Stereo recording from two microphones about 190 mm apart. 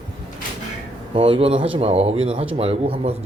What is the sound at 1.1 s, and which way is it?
Speech, 30° right (ahead or behind).